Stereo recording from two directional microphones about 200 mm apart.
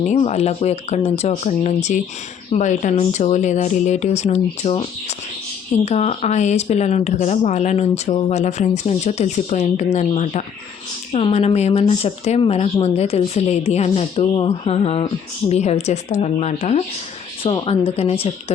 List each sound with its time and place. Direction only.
0.0 s speech: 35° left (ahead or behind)